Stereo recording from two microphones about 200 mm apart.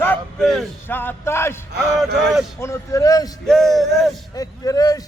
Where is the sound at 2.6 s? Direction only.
15° left (ahead or behind).